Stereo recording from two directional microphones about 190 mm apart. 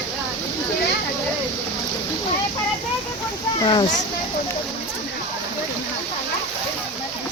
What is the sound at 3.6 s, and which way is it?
Speech, 25° left (ahead or behind).